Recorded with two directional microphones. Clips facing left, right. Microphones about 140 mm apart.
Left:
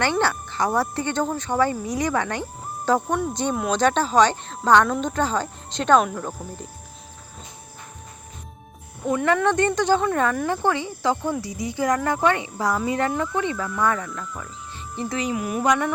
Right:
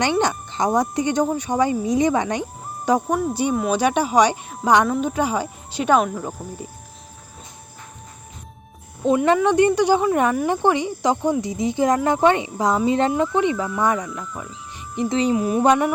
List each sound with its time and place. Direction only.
0.0 s speech: 15° right (ahead or behind)
9.0 s speech: 20° right (ahead or behind)
14.9 s speech: 25° right (ahead or behind)